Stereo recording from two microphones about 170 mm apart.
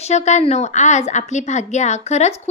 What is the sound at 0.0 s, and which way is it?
A woman's voice, 40° left (ahead or behind).